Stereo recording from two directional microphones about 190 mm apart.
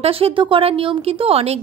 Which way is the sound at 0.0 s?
30° right (ahead or behind).